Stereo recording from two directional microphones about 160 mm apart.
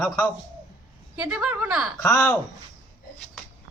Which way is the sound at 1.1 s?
5° right (ahead or behind).